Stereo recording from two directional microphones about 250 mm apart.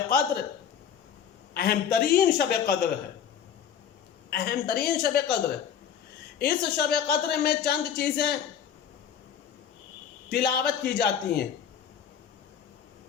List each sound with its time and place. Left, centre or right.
0.1 s a woman's voice: left
1.5 s a woman's voice: left
4.3 s a woman's voice: left
6.4 s a woman's voice: left
10.2 s a woman's voice: left